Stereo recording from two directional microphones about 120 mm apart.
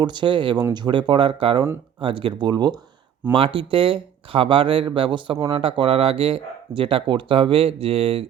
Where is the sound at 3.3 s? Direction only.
45° right (ahead or behind).